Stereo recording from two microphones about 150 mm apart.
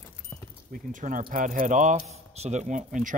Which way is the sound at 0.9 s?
60° right (ahead or behind).